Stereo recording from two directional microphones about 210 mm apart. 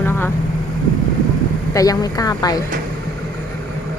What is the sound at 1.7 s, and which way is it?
Speech, 15° left (ahead or behind).